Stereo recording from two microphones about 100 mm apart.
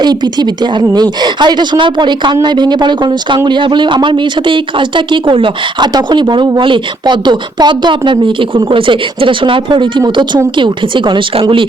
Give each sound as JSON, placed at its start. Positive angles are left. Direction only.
{"t": 0.0, "sound": "a woman's voice", "side_deg": -45}